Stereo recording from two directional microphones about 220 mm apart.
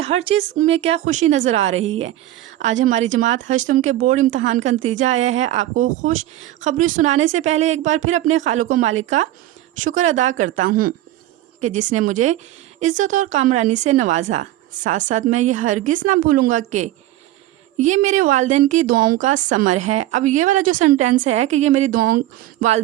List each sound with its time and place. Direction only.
0.0 s speech: 30° right (ahead or behind)